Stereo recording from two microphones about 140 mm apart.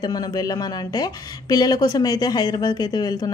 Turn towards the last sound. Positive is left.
turn(degrees=30)  # may be behind; listen again after turning